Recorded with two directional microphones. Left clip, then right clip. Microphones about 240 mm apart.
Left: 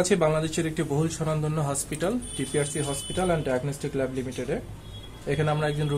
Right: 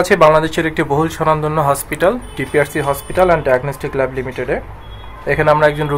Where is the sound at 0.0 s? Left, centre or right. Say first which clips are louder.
Right 13 dB; right.